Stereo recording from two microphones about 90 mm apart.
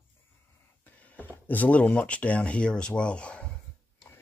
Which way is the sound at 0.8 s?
15° left (ahead or behind).